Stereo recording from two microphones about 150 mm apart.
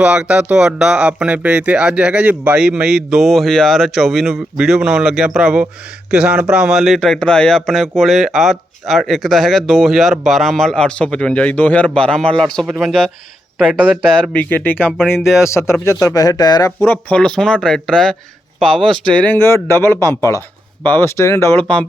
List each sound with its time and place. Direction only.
0.0 s a man's voice: 10° right (ahead or behind); by 16.7 s 25° left (ahead or behind)
16.8 s a man's voice: 10° left (ahead or behind)